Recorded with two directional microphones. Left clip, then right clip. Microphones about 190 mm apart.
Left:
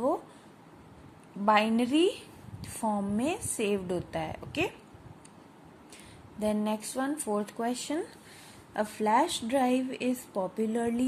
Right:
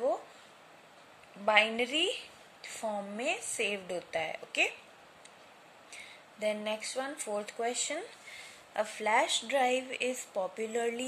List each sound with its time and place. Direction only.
1.4 s speech: 5° left (ahead or behind)
6.4 s a sound: 5° left (ahead or behind)
7.3 s speech: 5° left (ahead or behind)